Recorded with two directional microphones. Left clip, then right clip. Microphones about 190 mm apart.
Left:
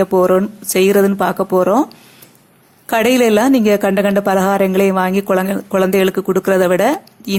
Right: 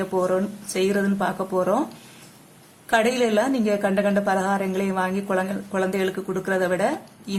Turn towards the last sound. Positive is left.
turn(degrees=30)  # may be behind; listen again after turning